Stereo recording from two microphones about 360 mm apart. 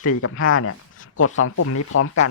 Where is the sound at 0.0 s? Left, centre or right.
Left.